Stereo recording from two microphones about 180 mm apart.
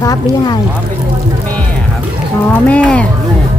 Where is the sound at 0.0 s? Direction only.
20° left (ahead or behind).